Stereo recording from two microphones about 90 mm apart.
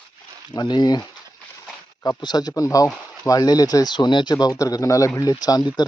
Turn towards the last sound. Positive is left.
turn(degrees=45)  # may be behind; listen again after turning